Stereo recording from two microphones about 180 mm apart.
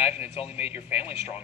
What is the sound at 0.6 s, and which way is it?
Speech, 10° right (ahead or behind).